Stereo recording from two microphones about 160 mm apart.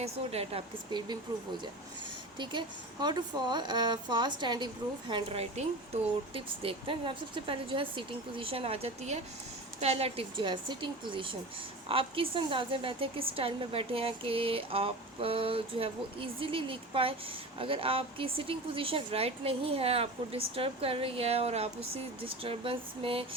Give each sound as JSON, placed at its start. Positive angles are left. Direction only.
{"t": 0.0, "sound": "speech", "side_deg": -40}
{"t": 0.9, "sound": "speech", "side_deg": -25}